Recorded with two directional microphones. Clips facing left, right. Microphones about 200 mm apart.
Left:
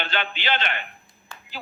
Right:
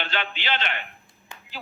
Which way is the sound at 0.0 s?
50° left (ahead or behind).